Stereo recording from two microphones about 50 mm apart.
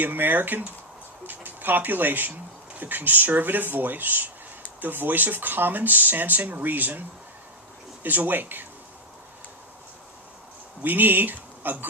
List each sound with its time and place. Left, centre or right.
0.0 s speech: right
10.8 s speech: right